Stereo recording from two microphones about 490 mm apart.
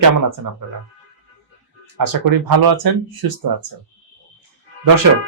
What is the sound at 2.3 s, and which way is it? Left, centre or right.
Speech, right.